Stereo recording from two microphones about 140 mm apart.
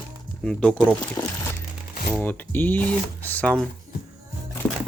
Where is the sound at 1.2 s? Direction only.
25° left (ahead or behind).